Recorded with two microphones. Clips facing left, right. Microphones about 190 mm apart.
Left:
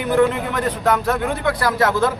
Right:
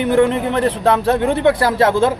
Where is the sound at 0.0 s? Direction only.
30° right (ahead or behind).